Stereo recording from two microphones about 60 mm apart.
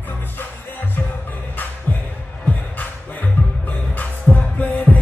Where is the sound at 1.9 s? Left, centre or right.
Left.